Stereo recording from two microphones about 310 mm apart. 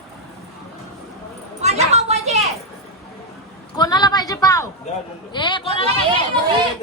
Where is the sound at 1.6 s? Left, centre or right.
Right.